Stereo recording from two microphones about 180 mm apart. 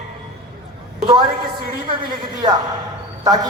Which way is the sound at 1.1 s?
25° right (ahead or behind).